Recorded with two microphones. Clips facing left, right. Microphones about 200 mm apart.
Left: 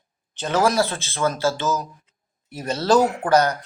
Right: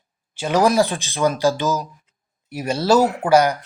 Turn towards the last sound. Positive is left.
turn(degrees=-10)  # may be behind; listen again after turning